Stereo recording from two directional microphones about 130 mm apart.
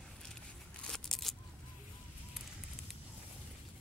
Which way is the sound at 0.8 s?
Centre (ahead or behind).